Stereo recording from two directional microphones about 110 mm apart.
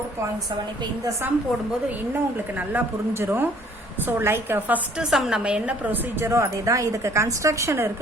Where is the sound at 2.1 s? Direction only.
20° right (ahead or behind).